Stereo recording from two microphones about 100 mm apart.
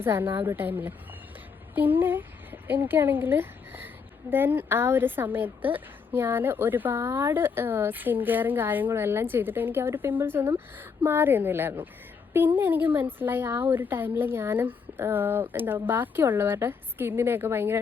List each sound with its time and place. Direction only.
0.0 s a woman's voice: 25° right (ahead or behind)